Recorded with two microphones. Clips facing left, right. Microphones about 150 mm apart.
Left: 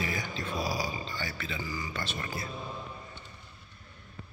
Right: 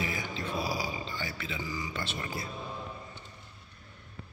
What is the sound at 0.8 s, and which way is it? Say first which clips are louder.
Speech: even; 15° right (ahead or behind).